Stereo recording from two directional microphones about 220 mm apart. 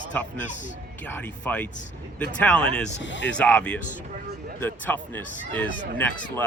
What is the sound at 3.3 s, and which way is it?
Speech, 5° left (ahead or behind).